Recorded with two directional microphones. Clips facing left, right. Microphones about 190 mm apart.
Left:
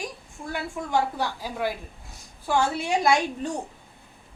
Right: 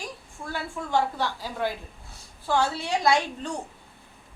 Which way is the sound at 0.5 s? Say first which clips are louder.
Left 1 dB; 15° left (ahead or behind).